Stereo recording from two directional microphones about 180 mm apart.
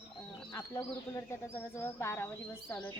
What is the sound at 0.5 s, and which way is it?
Speech, 15° left (ahead or behind).